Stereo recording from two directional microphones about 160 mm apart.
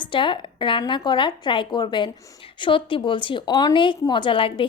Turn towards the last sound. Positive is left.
turn(degrees=35)  # may be behind; listen again after turning